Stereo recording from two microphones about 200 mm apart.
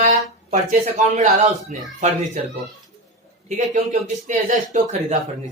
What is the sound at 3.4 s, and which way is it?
Speech, 40° right (ahead or behind).